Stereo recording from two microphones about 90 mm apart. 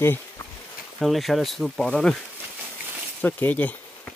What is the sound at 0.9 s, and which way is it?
Speech, centre (ahead or behind).